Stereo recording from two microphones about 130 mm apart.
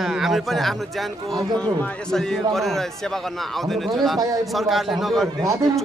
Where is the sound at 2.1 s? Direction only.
Centre (ahead or behind).